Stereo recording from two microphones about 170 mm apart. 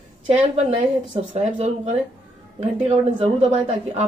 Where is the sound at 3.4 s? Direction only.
40° right (ahead or behind).